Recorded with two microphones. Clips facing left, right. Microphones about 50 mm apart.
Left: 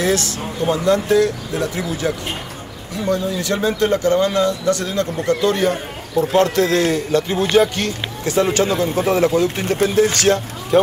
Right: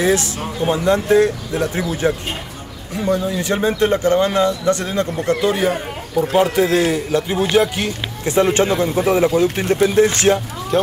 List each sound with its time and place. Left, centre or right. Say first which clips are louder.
0.0 s speech: right 2 dB; right; by 7.9 s centre
8.5 s speech: right 1 dB; right
10.7 s speech: left 3 dB; centre